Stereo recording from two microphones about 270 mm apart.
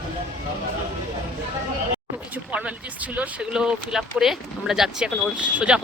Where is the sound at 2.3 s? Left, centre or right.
Centre.